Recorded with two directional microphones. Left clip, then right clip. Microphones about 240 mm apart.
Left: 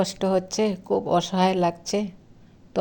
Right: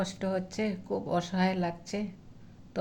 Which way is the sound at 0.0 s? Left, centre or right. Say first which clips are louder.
Left 9 dB; left.